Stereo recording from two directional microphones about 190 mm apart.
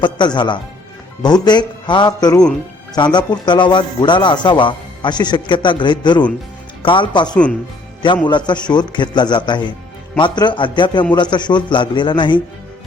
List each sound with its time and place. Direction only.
0.0 s a man's voice: 25° left (ahead or behind)